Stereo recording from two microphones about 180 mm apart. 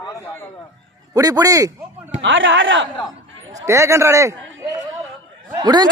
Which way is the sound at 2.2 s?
90° right.